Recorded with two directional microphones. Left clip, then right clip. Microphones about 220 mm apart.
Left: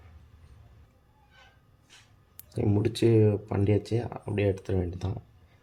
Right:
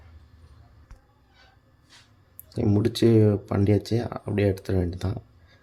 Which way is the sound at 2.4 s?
10° right (ahead or behind).